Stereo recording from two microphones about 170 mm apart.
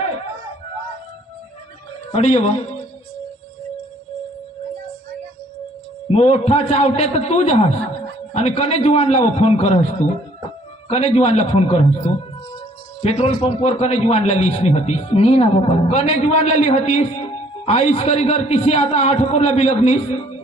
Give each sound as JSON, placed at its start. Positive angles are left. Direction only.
{"t": 2.0, "sound": "a woman's voice", "side_deg": 40}
{"t": 6.0, "sound": "a man's voice", "side_deg": 35}
{"t": 10.9, "sound": "a man's voice", "side_deg": 40}